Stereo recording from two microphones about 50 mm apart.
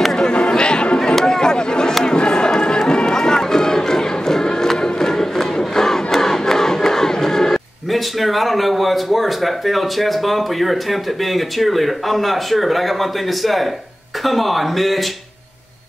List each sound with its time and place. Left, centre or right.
0.2 s a sound: centre
2.0 s run: centre
7.9 s speech: centre